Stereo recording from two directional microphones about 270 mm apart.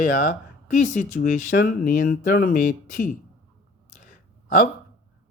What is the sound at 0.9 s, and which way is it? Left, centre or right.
Speech, left.